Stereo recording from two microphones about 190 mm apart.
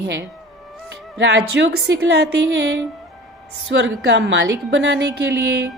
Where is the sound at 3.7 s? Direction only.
70° right (ahead or behind).